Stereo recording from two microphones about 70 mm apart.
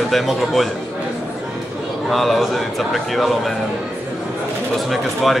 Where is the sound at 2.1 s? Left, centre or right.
Centre.